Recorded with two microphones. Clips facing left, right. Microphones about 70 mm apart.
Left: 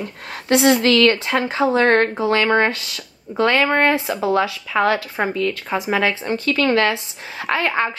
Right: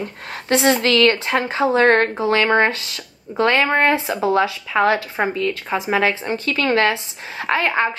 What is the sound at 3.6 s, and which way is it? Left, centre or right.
Speech, centre.